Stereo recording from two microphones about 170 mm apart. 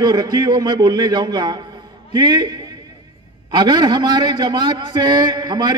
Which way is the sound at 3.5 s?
25° right (ahead or behind).